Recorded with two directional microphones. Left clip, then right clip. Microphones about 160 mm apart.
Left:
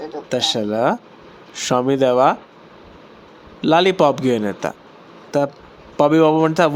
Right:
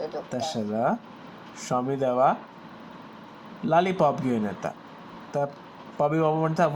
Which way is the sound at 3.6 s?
60° left (ahead or behind).